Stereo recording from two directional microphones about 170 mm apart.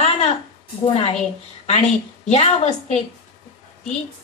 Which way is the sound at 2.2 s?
40° left (ahead or behind).